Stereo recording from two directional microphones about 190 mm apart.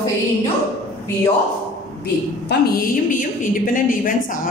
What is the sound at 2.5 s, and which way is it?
A woman's voice, 50° left (ahead or behind).